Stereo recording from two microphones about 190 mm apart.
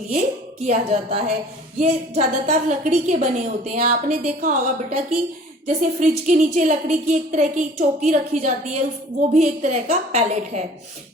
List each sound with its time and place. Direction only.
0.6 s a woman's voice: 35° right (ahead or behind)